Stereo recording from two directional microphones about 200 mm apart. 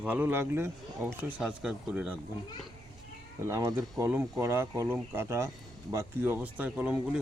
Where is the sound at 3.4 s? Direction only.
15° right (ahead or behind).